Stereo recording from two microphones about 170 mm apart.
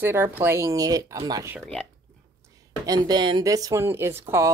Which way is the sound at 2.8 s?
20° right (ahead or behind).